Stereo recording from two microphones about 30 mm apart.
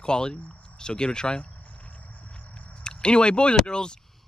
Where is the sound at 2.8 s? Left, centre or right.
Left.